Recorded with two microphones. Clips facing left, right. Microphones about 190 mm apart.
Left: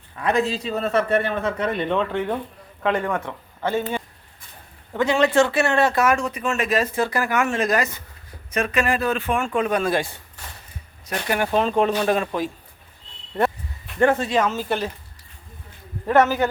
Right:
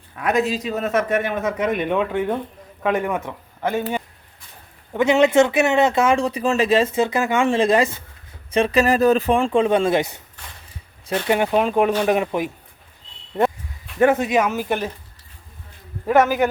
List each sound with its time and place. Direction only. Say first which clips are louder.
0.3 s speech: right 1 dB; 15° right (ahead or behind)
11.6 s speech: right 2 dB; 10° right (ahead or behind)
13.8 s speech: right 2 dB; 10° right (ahead or behind)
16.0 s speech: right 1 dB; 10° right (ahead or behind)